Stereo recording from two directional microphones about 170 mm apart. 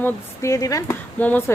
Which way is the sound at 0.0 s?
20° left (ahead or behind).